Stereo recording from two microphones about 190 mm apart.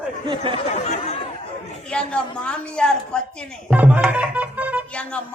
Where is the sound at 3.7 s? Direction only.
5° right (ahead or behind).